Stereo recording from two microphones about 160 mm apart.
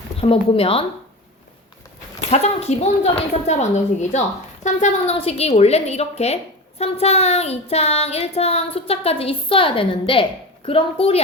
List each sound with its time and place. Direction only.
0.2 s a woman's voice: 35° left (ahead or behind)
2.3 s a woman's voice: 40° left (ahead or behind)